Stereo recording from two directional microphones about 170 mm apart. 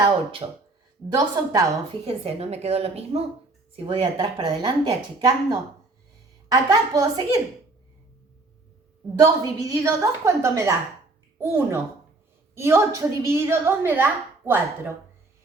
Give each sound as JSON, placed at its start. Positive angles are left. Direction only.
{"t": 0.0, "sound": "a woman's voice", "side_deg": -30}
{"t": 2.0, "sound": "a woman's voice", "side_deg": -40}
{"t": 9.2, "sound": "a woman's voice", "side_deg": -20}